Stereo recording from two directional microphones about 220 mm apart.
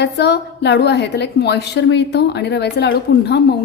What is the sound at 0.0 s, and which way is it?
A woman's voice, 50° left (ahead or behind).